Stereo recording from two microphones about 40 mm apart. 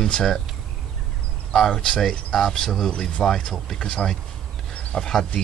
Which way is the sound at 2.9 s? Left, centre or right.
Left.